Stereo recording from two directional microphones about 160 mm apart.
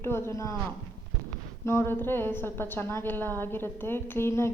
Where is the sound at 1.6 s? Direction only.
15° left (ahead or behind).